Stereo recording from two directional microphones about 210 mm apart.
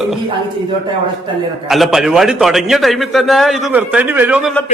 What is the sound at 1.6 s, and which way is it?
A man's voice, centre (ahead or behind).